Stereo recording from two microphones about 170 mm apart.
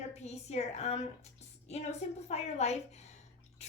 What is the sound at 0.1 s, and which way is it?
Speech, 40° left (ahead or behind).